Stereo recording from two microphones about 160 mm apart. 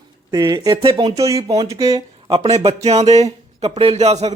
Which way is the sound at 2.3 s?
40° right (ahead or behind).